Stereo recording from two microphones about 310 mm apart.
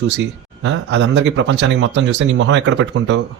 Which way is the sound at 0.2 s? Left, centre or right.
Right.